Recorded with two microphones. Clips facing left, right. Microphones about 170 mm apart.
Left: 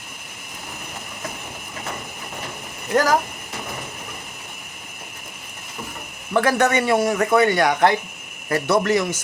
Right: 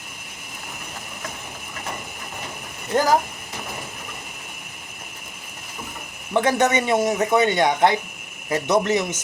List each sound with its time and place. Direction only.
2.9 s speech: 20° right (ahead or behind)
6.3 s speech: 20° right (ahead or behind)